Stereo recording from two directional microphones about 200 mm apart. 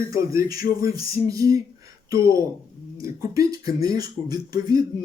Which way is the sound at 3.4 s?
20° right (ahead or behind).